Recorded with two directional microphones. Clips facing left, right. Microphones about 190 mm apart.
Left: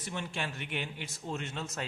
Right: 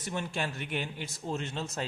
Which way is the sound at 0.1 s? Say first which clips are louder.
Right 4 dB; 40° right (ahead or behind).